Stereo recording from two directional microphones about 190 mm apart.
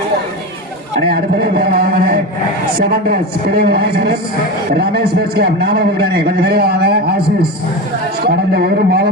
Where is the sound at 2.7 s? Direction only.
50° right (ahead or behind).